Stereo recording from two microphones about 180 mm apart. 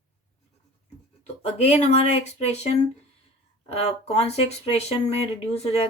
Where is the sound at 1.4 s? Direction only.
35° left (ahead or behind).